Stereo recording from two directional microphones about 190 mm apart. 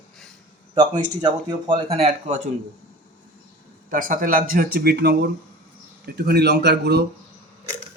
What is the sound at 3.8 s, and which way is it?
Speech, 45° right (ahead or behind).